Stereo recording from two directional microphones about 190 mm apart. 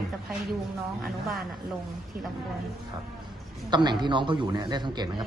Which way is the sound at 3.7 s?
25° right (ahead or behind).